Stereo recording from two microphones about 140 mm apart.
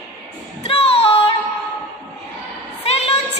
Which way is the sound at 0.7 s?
45° left (ahead or behind).